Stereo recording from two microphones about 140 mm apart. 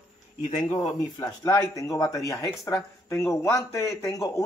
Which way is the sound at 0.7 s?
25° left (ahead or behind).